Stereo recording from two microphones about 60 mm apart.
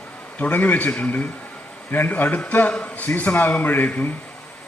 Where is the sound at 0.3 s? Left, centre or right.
Left.